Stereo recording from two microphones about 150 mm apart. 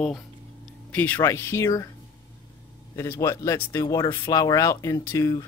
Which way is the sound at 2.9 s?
20° left (ahead or behind).